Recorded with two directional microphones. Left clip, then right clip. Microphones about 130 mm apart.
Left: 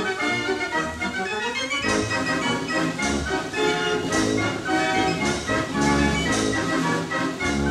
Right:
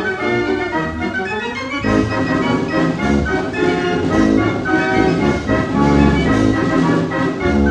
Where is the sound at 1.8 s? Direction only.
30° left (ahead or behind).